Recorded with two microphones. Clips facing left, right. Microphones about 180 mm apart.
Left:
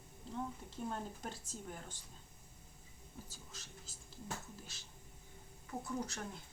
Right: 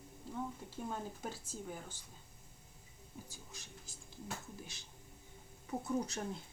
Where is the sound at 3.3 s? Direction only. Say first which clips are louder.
Right 1 dB; 15° right (ahead or behind).